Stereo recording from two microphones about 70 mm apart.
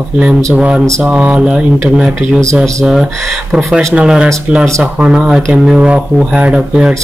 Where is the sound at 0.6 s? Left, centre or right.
Centre.